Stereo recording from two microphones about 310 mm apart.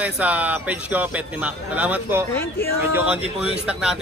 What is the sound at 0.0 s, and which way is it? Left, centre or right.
Speech, centre.